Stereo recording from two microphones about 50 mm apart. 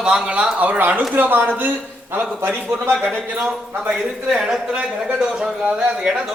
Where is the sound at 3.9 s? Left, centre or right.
Centre.